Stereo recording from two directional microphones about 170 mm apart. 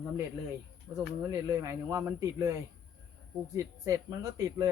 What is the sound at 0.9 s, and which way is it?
Speech, 20° right (ahead or behind).